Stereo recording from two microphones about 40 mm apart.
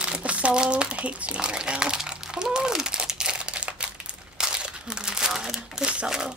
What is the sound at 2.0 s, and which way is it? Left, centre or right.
Crumpling, right.